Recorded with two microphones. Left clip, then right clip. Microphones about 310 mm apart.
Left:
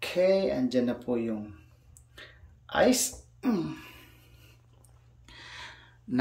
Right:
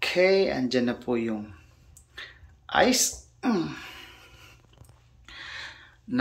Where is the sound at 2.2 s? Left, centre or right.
Centre.